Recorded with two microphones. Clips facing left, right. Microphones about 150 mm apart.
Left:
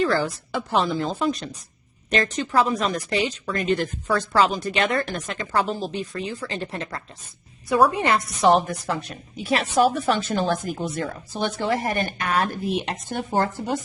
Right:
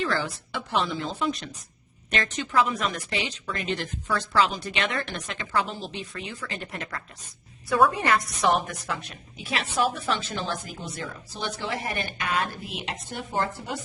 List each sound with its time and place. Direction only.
0.0 s a woman's voice: 40° left (ahead or behind)
7.9 s a woman's voice: 20° left (ahead or behind); by 13.7 s 40° left (ahead or behind)